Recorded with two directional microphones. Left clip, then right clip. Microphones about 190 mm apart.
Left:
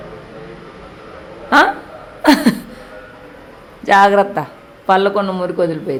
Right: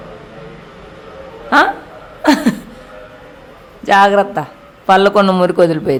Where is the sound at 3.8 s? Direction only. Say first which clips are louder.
Right 1 dB; 5° right (ahead or behind).